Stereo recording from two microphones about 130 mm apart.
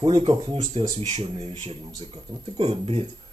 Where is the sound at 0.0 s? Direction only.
45° right (ahead or behind).